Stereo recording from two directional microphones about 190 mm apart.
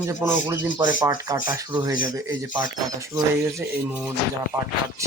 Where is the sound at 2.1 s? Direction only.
10° right (ahead or behind).